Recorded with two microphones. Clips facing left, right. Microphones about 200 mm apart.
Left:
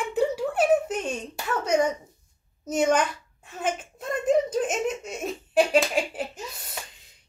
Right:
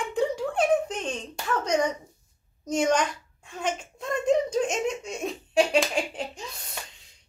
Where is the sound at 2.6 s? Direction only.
5° left (ahead or behind).